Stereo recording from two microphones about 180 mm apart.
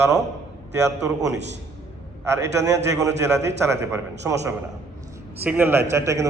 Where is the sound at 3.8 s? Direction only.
15° right (ahead or behind).